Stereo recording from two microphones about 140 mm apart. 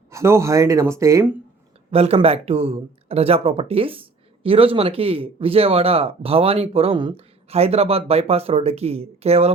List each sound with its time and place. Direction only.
0.1 s speech: 20° right (ahead or behind)
1.9 s speech: 45° right (ahead or behind)